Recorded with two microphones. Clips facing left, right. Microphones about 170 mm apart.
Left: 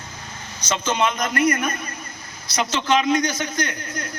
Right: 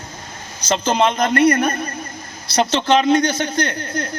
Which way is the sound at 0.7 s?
35° right (ahead or behind).